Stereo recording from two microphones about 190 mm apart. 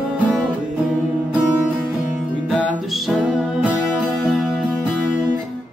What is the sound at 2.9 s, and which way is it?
Music, centre (ahead or behind).